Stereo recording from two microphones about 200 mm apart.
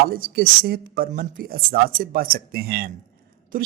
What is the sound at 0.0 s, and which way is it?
Speech, 45° right (ahead or behind).